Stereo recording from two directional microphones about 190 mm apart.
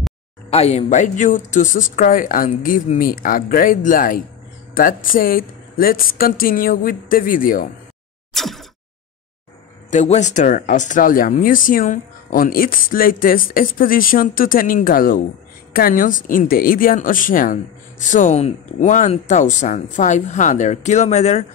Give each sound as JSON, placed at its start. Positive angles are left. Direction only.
{"t": 0.5, "sound": "speech", "side_deg": 35}
{"t": 8.4, "sound": "a sound", "side_deg": 0}
{"t": 9.8, "sound": "speech", "side_deg": 40}